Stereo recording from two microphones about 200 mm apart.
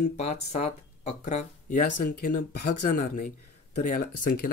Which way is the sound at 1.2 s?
45° left (ahead or behind).